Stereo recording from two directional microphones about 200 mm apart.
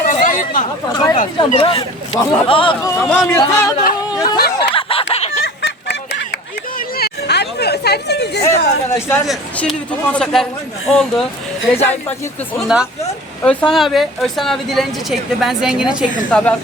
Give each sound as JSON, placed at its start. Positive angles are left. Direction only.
{"t": 0.0, "sound": "chatter", "side_deg": 40}
{"t": 0.9, "sound": "speech", "side_deg": 20}
{"t": 2.9, "sound": "speech", "side_deg": 5}
{"t": 4.1, "sound": "a sound", "side_deg": 20}
{"t": 5.6, "sound": "a sound", "side_deg": 55}
{"t": 8.4, "sound": "speech", "side_deg": 15}
{"t": 9.2, "sound": "speech", "side_deg": 0}
{"t": 12.5, "sound": "speech", "side_deg": -5}
{"t": 13.0, "sound": "speech", "side_deg": 5}
{"t": 16.3, "sound": "speech", "side_deg": 5}